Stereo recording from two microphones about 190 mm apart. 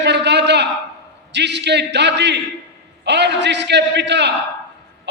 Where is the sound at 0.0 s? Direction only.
65° right (ahead or behind).